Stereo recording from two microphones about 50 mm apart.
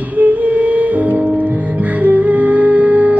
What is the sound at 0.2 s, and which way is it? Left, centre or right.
Music, right.